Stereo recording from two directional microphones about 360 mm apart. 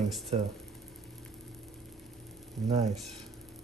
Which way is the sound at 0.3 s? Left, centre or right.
Centre.